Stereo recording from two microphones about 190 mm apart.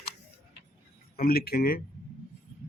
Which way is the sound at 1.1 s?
50° left (ahead or behind).